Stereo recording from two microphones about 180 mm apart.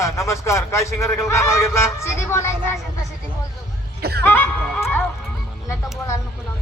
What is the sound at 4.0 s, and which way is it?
Speech, 65° right (ahead or behind).